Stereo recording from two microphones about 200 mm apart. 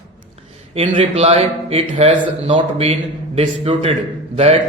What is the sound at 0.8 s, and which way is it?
Speech, 30° right (ahead or behind).